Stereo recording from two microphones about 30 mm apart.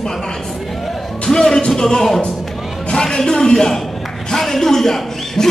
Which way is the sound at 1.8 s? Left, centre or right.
Centre.